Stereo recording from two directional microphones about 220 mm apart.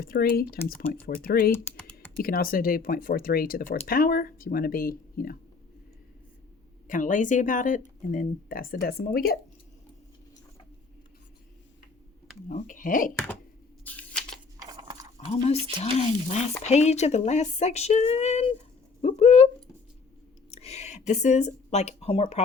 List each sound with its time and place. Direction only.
0.0 s speech: 40° left (ahead or behind)
1.7 s typing: 5° left (ahead or behind)
2.1 s speech: 40° left (ahead or behind)
6.8 s speech: 35° left (ahead or behind)
12.6 s speech: 35° left (ahead or behind)
13.8 s scissors: 5° left (ahead or behind)
14.6 s a sound: 20° right (ahead or behind)
15.3 s speech: 30° left (ahead or behind)
20.5 s a sound: 30° left (ahead or behind)